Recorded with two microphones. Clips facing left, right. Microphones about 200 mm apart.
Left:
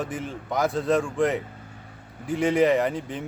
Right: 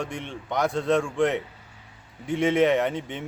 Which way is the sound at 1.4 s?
50° left (ahead or behind).